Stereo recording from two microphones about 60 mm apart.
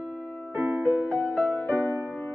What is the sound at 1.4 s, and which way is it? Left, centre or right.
Music, left.